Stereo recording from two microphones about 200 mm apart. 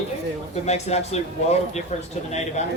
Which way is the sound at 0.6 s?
35° left (ahead or behind).